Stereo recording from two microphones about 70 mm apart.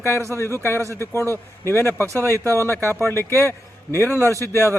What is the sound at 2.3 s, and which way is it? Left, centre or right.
A man's voice, left.